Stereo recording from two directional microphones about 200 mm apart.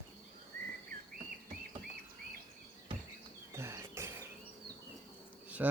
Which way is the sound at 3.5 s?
15° right (ahead or behind).